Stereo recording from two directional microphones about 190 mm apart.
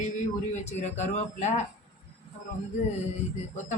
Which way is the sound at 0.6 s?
35° left (ahead or behind).